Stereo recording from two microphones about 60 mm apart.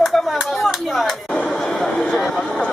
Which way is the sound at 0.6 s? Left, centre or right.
Centre.